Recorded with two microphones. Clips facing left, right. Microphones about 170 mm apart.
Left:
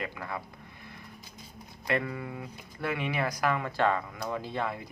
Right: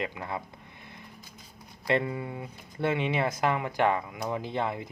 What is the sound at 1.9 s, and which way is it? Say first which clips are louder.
Speech: right 3 dB; 25° right (ahead or behind).